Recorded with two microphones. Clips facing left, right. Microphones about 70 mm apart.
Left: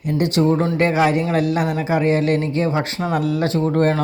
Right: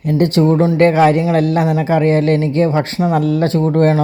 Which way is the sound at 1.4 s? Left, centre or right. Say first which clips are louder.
Right 5 dB; right.